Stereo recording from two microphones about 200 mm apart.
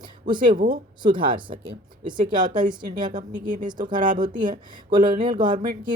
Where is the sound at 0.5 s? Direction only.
45° right (ahead or behind).